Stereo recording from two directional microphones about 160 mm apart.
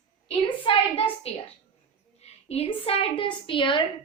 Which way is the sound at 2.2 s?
40° left (ahead or behind).